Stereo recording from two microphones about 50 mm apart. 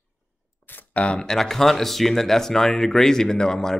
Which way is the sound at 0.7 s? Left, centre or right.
Left.